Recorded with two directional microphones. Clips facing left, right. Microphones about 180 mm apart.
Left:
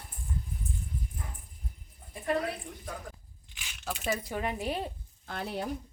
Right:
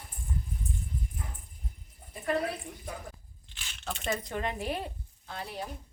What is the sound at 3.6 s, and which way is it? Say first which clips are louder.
Speech: left 1 dB; 5° left (ahead or behind).